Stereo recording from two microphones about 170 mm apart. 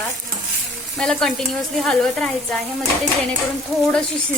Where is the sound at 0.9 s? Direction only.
5° left (ahead or behind).